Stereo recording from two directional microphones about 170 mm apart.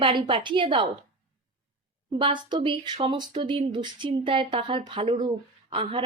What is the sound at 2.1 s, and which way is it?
A woman's voice, 30° right (ahead or behind).